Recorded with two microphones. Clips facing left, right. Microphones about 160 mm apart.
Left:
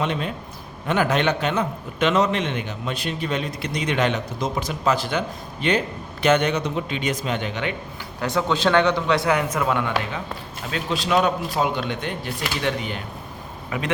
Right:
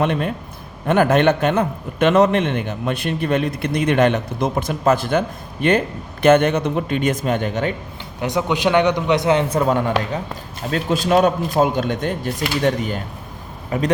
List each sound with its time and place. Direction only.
0.0 s a man's voice: 55° right (ahead or behind)
8.2 s a man's voice: 20° right (ahead or behind); by 13.9 s 40° right (ahead or behind)